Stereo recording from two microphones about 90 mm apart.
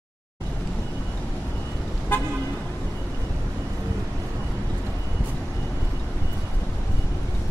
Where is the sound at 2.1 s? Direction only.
25° left (ahead or behind).